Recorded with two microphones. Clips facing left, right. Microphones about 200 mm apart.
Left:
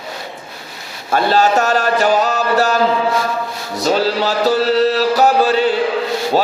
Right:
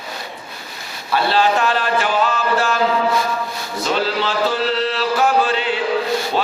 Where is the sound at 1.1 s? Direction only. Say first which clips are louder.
Left 3 dB; 45° left (ahead or behind).